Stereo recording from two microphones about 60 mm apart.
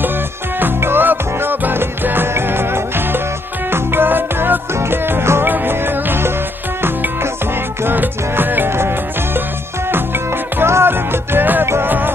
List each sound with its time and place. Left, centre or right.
0.6 s music: right
7.8 s music: right
10.6 s music: right
11.6 s music: right